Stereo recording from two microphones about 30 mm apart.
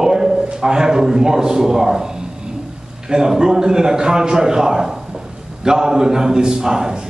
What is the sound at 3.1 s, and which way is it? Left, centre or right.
A man's voice, right.